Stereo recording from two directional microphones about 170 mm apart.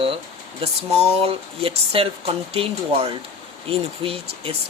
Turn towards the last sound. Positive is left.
turn(degrees=-35)  # may be behind; listen again after turning